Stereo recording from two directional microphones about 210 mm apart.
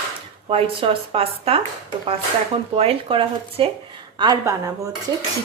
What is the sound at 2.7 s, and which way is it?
A woman's voice, 25° right (ahead or behind).